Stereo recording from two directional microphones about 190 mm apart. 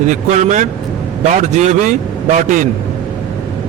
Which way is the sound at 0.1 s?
40° right (ahead or behind).